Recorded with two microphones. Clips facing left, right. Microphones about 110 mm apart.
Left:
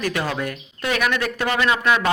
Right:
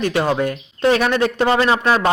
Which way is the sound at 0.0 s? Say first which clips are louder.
Right 6 dB; 25° right (ahead or behind).